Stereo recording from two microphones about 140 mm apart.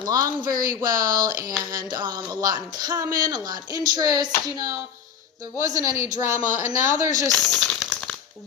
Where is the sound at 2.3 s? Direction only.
30° right (ahead or behind).